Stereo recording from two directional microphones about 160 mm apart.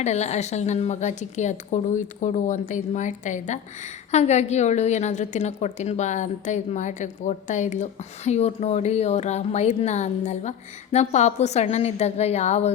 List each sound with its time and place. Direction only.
0.0 s a woman's voice: 45° left (ahead or behind)